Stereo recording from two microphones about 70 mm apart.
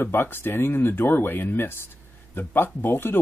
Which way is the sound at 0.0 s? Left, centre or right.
Left.